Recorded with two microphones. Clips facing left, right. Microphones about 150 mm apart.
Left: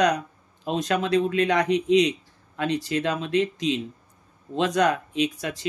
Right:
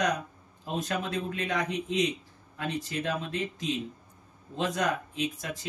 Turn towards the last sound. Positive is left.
turn(degrees=80)